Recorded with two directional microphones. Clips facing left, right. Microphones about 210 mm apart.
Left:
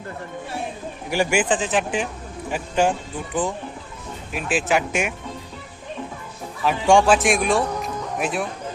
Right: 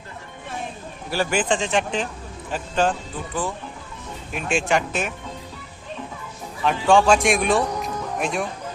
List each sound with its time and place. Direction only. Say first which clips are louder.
1.1 s speech: left 2 dB; 10° left (ahead or behind)
4.3 s speech: even; 5° left (ahead or behind)
6.6 s speech: left 1 dB; 10° left (ahead or behind)